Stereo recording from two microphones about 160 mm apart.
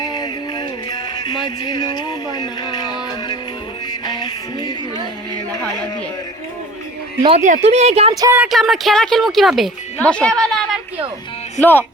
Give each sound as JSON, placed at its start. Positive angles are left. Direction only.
{"t": 0.0, "sound": "music", "side_deg": 25}
{"t": 1.6, "sound": "music", "side_deg": 25}
{"t": 7.2, "sound": "speech", "side_deg": -35}
{"t": 7.4, "sound": "speech", "side_deg": -45}
{"t": 8.4, "sound": "speech", "side_deg": 0}